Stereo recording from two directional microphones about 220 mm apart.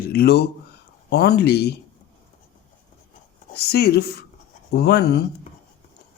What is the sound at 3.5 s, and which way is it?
Speech, 45° left (ahead or behind).